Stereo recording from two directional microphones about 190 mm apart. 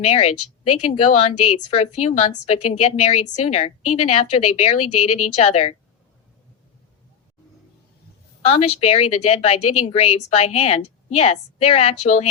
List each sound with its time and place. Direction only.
0.0 s a woman's voice: 35° left (ahead or behind)
8.4 s a woman's voice: 30° left (ahead or behind)